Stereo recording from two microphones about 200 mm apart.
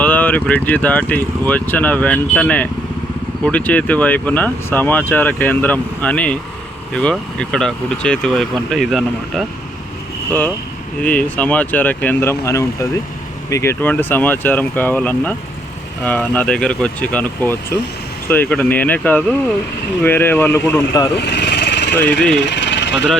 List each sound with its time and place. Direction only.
0.0 s speech: 10° left (ahead or behind)
11.0 s speech: 5° left (ahead or behind)
21.2 s a sound: 55° left (ahead or behind)